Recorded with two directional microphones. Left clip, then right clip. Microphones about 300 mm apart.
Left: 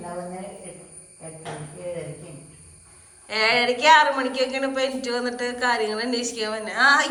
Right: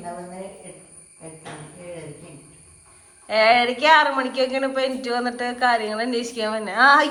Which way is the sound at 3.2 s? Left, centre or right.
Centre.